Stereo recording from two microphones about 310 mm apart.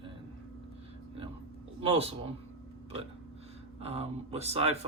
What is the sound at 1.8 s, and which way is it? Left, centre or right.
Speech, centre.